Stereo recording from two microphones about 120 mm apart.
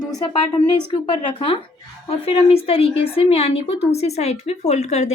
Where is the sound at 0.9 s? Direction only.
45° left (ahead or behind); by 5.1 s 60° left (ahead or behind).